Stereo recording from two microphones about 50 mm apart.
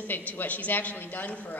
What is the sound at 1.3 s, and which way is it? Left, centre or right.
Speech, left.